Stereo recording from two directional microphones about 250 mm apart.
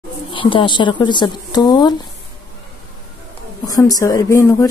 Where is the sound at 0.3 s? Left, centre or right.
Centre.